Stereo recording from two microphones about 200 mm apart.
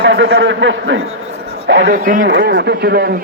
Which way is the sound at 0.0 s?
60° right (ahead or behind).